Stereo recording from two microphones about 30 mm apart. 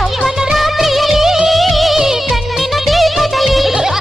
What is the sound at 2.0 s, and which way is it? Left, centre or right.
Music, centre.